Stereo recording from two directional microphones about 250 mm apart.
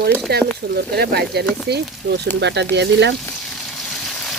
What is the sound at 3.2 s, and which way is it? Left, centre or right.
Frying, centre.